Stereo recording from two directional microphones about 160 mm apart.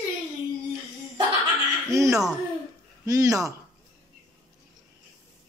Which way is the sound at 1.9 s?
20° right (ahead or behind).